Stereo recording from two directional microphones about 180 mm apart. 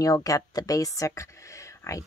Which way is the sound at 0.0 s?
20° left (ahead or behind).